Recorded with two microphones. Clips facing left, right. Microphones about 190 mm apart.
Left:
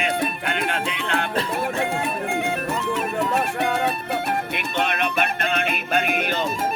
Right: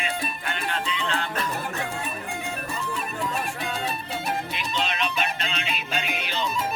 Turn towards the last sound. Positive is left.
turn(degrees=55)  # may be behind; listen again after turning